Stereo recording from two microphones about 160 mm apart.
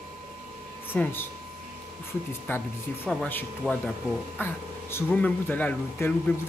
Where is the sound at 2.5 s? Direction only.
15° left (ahead or behind).